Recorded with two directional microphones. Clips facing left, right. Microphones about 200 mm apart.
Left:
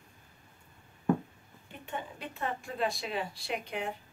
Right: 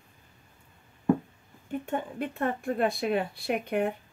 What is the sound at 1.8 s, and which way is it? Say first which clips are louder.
Speech: right 6 dB; 50° right (ahead or behind).